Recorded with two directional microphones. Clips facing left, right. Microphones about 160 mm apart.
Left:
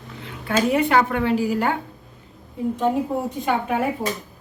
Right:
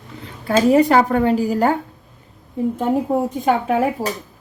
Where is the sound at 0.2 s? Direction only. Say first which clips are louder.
Right 5 dB; 35° right (ahead or behind).